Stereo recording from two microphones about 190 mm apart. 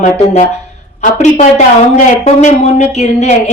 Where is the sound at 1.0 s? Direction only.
40° left (ahead or behind).